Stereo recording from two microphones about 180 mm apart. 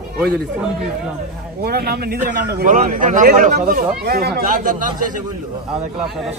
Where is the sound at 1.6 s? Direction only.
60° right (ahead or behind); by 3.6 s 45° right (ahead or behind).